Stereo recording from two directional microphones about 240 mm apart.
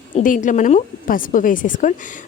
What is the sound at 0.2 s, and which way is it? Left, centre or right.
A woman's voice, left.